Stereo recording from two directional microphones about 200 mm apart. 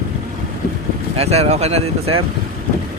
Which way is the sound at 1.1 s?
30° right (ahead or behind).